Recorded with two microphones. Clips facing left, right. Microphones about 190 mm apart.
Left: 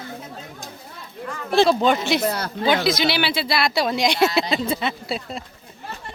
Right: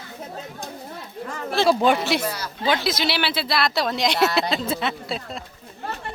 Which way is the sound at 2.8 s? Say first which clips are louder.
Left 3 dB; centre (ahead or behind).